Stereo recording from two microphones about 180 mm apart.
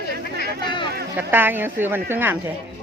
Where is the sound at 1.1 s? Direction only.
10° right (ahead or behind).